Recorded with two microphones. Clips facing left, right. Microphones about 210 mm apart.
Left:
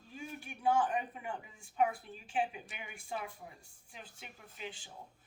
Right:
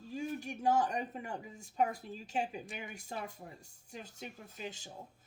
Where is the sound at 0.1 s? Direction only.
40° right (ahead or behind).